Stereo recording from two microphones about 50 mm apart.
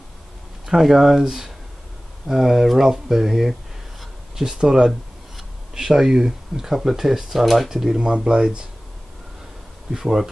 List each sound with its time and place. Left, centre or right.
0.7 s speech: centre
4.0 s a sound: centre
4.6 s speech: centre
8.0 s speech: centre
9.8 s speech: centre